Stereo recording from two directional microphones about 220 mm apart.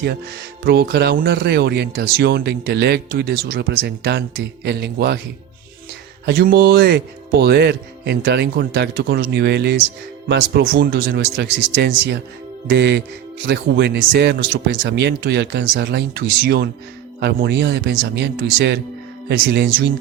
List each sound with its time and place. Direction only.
0.6 s speech: 45° right (ahead or behind)
6.2 s speech: 45° right (ahead or behind)